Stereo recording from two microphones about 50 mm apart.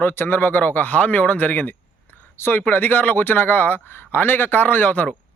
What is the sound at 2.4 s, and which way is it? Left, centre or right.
Speech, left.